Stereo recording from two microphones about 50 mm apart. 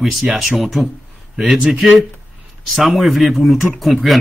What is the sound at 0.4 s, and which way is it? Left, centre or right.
A man's voice, centre.